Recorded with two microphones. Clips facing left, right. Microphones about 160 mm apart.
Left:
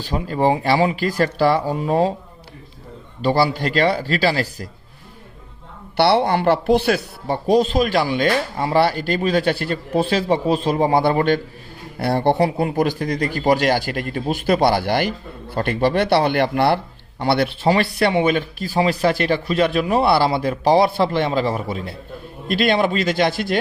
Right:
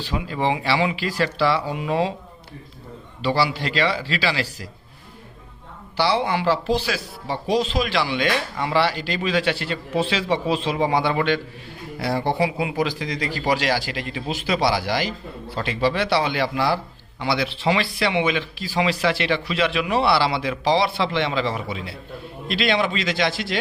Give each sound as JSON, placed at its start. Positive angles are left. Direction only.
{"t": 0.0, "sound": "a man's voice", "side_deg": 45}
{"t": 3.2, "sound": "a man's voice", "side_deg": 45}
{"t": 6.0, "sound": "a man's voice", "side_deg": 65}
{"t": 11.9, "sound": "speech", "side_deg": 60}
{"t": 12.5, "sound": "a man's voice", "side_deg": 50}
{"t": 18.0, "sound": "a man's voice", "side_deg": 45}